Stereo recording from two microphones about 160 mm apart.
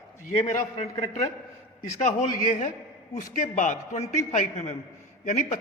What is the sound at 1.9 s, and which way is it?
A woman's voice, 45° left (ahead or behind).